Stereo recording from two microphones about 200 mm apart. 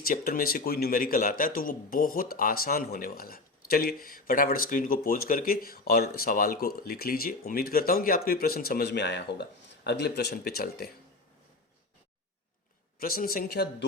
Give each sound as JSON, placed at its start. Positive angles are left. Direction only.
{"t": 0.0, "sound": "a man's voice", "side_deg": 45}
{"t": 13.0, "sound": "a man's voice", "side_deg": 45}